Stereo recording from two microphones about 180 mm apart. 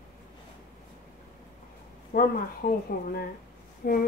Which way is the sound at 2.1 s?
55° left (ahead or behind).